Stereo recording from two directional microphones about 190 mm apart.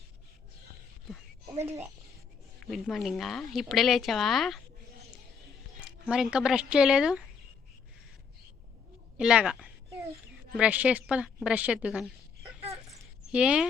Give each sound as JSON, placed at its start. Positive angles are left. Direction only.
{"t": 2.6, "sound": "speech", "side_deg": 0}
{"t": 6.1, "sound": "speech", "side_deg": -5}
{"t": 9.1, "sound": "a woman's voice", "side_deg": -5}
{"t": 12.9, "sound": "a sound", "side_deg": -5}